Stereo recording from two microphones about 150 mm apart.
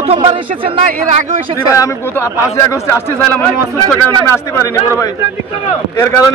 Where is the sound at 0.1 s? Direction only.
35° right (ahead or behind).